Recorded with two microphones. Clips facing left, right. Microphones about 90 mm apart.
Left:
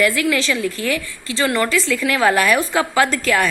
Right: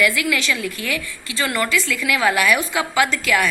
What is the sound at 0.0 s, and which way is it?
A woman's voice, 35° left (ahead or behind).